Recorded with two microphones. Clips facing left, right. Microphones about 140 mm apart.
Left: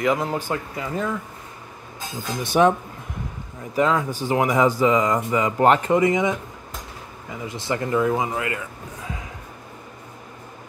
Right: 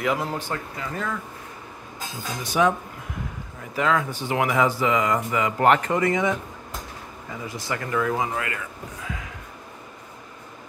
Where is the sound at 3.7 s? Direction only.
30° left (ahead or behind).